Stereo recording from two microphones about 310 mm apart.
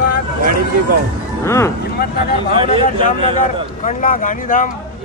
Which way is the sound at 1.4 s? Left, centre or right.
Centre.